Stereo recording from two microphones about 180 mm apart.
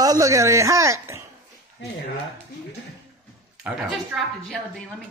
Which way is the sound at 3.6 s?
Centre (ahead or behind).